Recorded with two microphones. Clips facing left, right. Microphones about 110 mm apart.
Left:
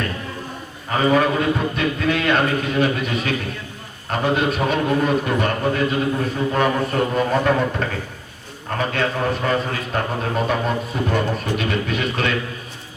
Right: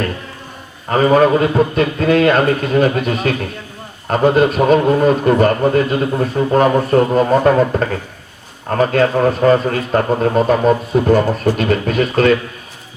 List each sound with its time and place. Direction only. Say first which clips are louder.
0.9 s speech: right 6 dB; 45° right (ahead or behind)